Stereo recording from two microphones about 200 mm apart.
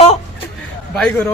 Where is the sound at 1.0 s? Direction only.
5° left (ahead or behind).